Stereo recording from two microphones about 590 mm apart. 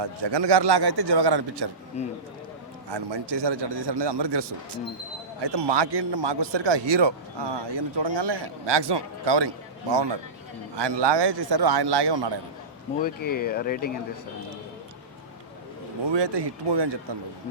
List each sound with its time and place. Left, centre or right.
0.0 s a man's voice: right
2.0 s speech: centre
2.9 s a man's voice: right
13.0 s speech: centre
16.0 s a man's voice: right